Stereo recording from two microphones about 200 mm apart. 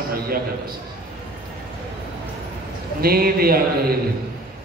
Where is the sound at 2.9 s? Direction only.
50° right (ahead or behind).